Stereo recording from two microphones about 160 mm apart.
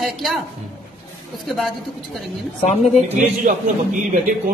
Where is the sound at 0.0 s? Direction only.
Centre (ahead or behind).